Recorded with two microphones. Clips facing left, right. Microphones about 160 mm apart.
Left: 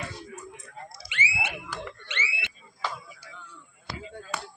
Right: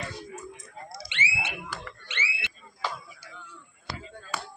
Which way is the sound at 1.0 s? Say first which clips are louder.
Left 2 dB; 25° right (ahead or behind).